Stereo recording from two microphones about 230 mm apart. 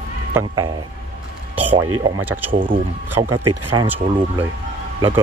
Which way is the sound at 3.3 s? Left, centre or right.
Right.